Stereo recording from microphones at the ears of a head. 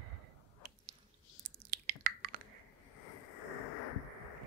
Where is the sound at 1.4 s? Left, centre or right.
Right.